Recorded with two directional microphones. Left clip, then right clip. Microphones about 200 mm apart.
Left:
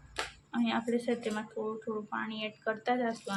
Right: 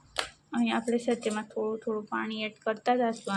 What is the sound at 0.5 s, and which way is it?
Speech, 20° right (ahead or behind).